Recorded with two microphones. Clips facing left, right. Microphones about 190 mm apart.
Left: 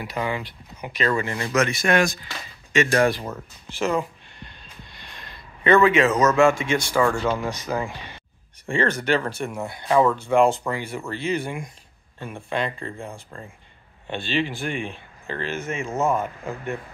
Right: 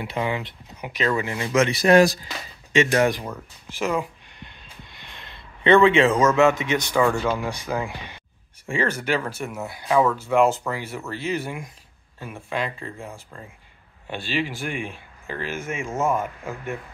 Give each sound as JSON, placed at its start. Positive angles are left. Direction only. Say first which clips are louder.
{"t": 0.0, "sound": "speech", "louder": "right 1 dB", "side_deg": -20}
{"t": 1.5, "sound": "speech", "louder": "right 5 dB", "side_deg": -30}
{"t": 3.0, "sound": "speech", "louder": "even", "side_deg": -15}
{"t": 5.0, "sound": "a man's voice", "louder": "left 1 dB", "side_deg": -20}
{"t": 7.0, "sound": "speech", "louder": "right 1 dB", "side_deg": -5}